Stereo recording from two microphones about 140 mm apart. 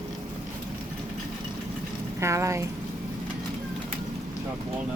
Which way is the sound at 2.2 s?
20° right (ahead or behind).